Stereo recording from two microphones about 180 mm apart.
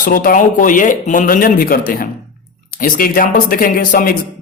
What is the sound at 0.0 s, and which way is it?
A man's voice, 50° left (ahead or behind).